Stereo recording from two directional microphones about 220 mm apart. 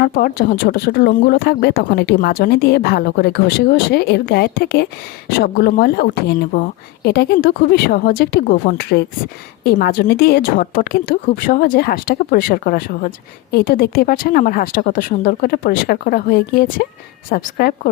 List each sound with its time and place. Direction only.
0.0 s a woman's voice: 40° left (ahead or behind)